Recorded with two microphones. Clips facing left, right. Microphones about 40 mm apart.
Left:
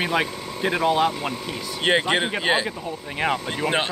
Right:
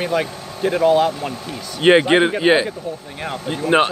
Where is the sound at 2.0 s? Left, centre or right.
Centre.